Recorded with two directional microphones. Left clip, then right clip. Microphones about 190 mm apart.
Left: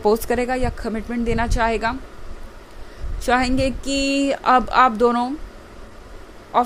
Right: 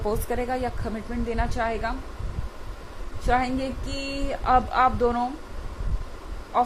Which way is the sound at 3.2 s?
45° left (ahead or behind).